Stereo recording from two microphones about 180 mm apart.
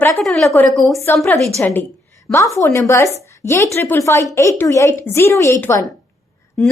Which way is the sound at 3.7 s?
15° left (ahead or behind).